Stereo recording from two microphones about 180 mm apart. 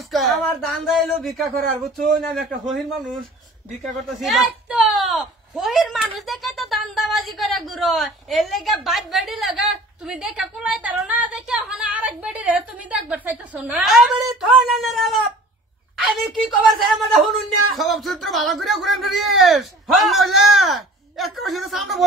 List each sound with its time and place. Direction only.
0.1 s speech: centre (ahead or behind)
3.8 s a man's voice: centre (ahead or behind)
17.0 s speech: centre (ahead or behind)